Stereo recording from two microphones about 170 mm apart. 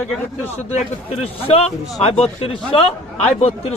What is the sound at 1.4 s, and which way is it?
Speech, 35° left (ahead or behind).